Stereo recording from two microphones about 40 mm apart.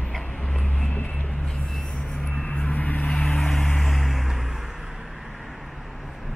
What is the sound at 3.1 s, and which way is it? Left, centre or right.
Vehicle, centre.